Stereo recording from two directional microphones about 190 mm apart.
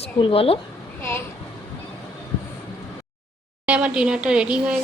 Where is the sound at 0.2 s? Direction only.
30° left (ahead or behind).